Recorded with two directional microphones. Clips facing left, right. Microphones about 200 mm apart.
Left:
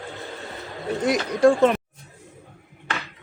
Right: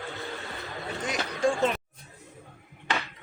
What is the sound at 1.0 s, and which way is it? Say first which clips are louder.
Speech: left 10 dB; 60° left (ahead or behind).